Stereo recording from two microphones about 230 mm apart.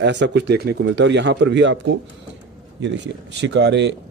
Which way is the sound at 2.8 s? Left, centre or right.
Right.